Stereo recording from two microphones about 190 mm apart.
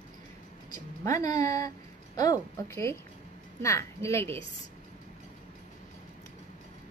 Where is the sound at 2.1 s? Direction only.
20° left (ahead or behind).